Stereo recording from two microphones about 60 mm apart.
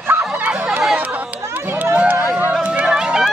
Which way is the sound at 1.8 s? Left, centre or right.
Right.